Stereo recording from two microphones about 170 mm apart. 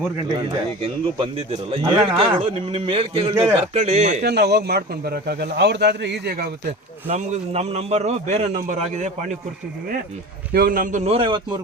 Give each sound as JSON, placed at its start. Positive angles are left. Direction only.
{"t": 0.3, "sound": "a man's voice", "side_deg": -30}
{"t": 4.2, "sound": "speech", "side_deg": -75}
{"t": 7.1, "sound": "a man's voice", "side_deg": -40}
{"t": 10.5, "sound": "a man's voice", "side_deg": -60}
{"t": 11.0, "sound": "a man's voice", "side_deg": -30}